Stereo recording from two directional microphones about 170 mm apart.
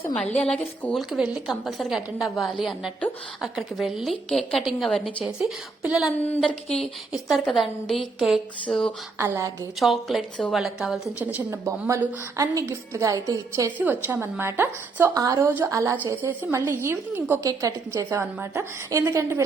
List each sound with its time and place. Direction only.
0.3 s a sound: 5° left (ahead or behind)
0.9 s a woman's voice: centre (ahead or behind)
6.2 s a sound: 10° left (ahead or behind)
6.7 s a woman's voice: centre (ahead or behind)
9.1 s a woman's voice: 15° right (ahead or behind)
9.8 s a woman's voice: centre (ahead or behind); by 19.4 s 15° right (ahead or behind)